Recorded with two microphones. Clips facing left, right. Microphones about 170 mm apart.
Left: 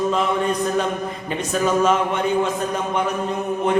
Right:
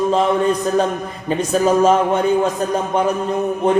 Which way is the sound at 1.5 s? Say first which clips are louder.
Right 4 dB; 35° right (ahead or behind).